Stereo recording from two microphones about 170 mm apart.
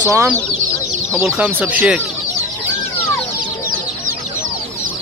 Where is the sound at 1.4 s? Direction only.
10° right (ahead or behind).